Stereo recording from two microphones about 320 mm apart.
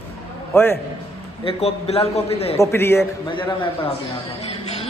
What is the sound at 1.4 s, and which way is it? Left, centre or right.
A man's voice, centre.